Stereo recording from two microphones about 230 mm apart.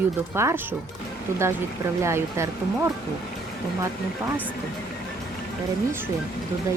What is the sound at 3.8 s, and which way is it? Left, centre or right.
Speech, centre.